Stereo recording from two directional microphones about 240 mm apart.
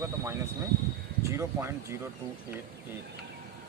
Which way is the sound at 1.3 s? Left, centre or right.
Centre.